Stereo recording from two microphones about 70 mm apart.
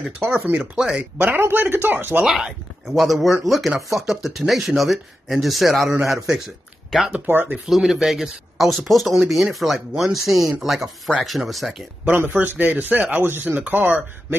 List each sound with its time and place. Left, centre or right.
0.2 s speech: right
0.6 s speech: centre
1.1 s speech: right
2.2 s speech: centre
7.1 s speech: centre
7.7 s speech: centre
12.3 s speech: right